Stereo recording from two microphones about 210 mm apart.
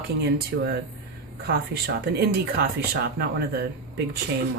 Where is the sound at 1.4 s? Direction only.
50° right (ahead or behind).